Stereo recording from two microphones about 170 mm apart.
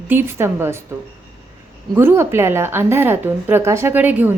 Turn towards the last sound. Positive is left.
turn(degrees=-10)  # may be behind; listen again after turning